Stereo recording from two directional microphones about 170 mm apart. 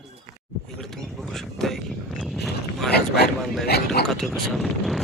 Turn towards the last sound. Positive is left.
turn(degrees=0)  # may be behind; listen again after turning